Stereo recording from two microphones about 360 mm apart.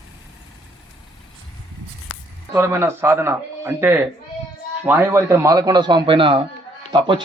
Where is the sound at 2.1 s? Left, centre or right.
Left.